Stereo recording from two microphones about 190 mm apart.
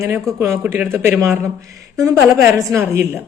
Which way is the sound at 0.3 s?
15° right (ahead or behind).